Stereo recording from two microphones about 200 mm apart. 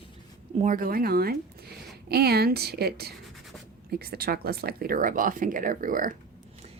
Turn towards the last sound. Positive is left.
turn(degrees=-45)  # may be behind; listen again after turning